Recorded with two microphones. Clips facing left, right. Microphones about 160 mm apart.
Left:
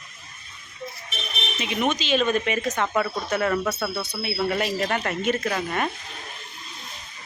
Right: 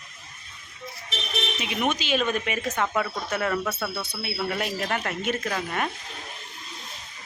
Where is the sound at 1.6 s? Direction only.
5° right (ahead or behind).